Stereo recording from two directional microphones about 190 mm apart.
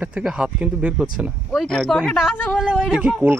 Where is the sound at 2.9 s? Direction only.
5° right (ahead or behind).